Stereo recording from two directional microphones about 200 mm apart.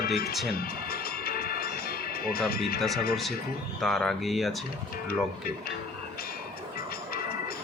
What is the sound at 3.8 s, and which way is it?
Speech, 5° left (ahead or behind).